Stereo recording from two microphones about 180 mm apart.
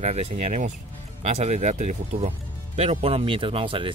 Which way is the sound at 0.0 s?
40° right (ahead or behind).